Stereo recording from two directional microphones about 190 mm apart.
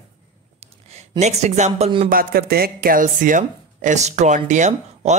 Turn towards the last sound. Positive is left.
turn(degrees=-40)  # may be behind; listen again after turning